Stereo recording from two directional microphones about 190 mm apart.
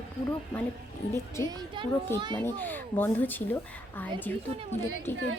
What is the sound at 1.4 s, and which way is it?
Speech, 20° right (ahead or behind).